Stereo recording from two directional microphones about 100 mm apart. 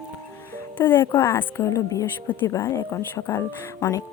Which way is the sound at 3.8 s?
35° left (ahead or behind).